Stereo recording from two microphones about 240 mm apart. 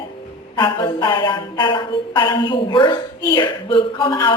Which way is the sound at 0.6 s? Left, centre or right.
Centre.